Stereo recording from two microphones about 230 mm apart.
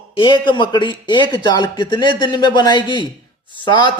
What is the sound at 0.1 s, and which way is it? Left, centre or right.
Speech, left.